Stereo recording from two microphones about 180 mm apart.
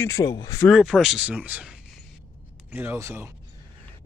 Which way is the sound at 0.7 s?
Centre (ahead or behind).